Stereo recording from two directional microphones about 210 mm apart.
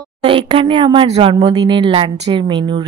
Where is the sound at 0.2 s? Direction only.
25° right (ahead or behind).